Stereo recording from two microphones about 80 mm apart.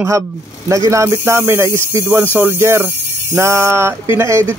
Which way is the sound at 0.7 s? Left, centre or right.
Right.